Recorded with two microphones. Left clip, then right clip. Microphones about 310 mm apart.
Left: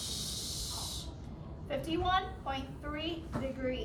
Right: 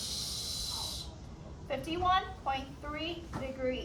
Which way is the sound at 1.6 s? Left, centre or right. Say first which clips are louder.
Right 2 dB; right.